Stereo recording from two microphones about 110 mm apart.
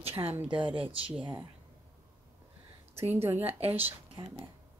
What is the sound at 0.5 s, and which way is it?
Speech, 50° right (ahead or behind).